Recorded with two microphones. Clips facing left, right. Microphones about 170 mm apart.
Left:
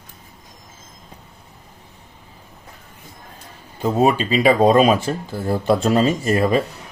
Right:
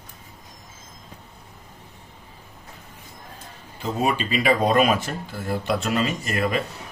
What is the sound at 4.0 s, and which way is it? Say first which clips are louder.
Speech: left 7 dB; 35° left (ahead or behind).